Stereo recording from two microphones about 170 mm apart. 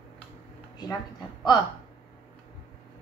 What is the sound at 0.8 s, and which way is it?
Speech, 25° left (ahead or behind).